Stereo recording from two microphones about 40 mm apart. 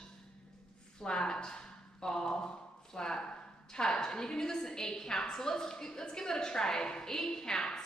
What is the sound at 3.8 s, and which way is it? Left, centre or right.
A woman's voice, centre.